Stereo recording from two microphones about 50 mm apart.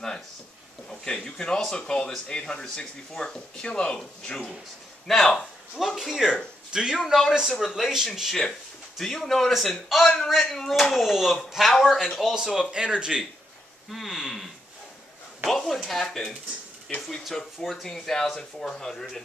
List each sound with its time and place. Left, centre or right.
0.8 s speech: centre
5.8 s a man's voice: centre
13.8 s speech: centre
15.5 s speech: centre